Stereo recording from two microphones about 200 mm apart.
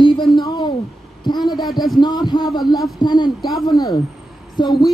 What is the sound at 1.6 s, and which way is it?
Heart murmur, centre (ahead or behind).